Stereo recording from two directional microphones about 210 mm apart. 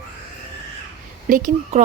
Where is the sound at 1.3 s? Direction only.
40° right (ahead or behind).